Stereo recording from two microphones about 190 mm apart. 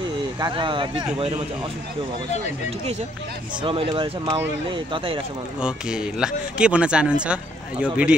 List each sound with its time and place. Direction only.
0.4 s speech: 25° right (ahead or behind)
3.6 s speech: 30° right (ahead or behind)
5.6 s speech: 5° right (ahead or behind)